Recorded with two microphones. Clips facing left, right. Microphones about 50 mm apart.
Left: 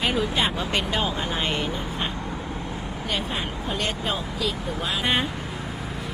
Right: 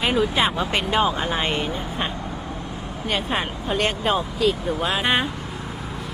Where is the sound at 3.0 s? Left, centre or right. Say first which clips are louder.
Right 5 dB; right.